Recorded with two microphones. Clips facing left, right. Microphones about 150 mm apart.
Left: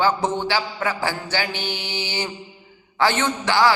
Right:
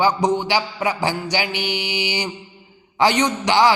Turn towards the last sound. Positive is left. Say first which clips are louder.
# right 2 dB
turn(degrees=-15)  # may be behind; listen again after turning